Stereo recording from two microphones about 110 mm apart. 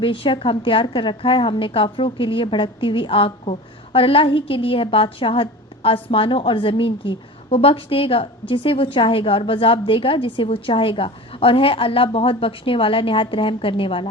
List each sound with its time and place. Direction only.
0.0 s a woman's voice: 50° left (ahead or behind)